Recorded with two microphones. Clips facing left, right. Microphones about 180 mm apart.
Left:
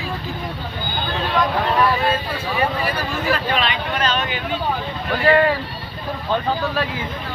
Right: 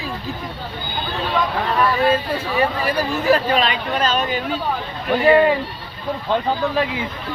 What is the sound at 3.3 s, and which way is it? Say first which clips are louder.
Speech: right 5 dB; 40° right (ahead or behind).